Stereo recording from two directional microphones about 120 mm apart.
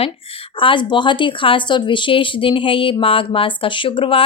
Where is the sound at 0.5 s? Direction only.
45° left (ahead or behind).